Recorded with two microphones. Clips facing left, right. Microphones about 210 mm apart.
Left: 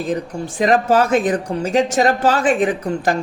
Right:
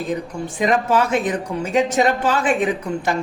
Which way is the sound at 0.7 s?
40° left (ahead or behind).